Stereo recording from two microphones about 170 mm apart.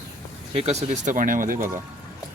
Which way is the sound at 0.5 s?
40° right (ahead or behind).